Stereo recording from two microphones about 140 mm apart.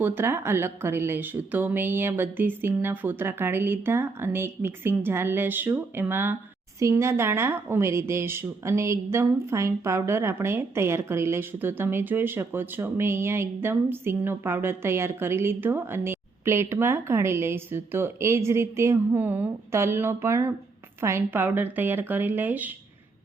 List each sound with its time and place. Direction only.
0.0 s speech: 15° right (ahead or behind)